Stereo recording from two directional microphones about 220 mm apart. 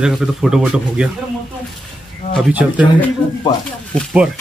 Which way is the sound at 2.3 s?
5° right (ahead or behind).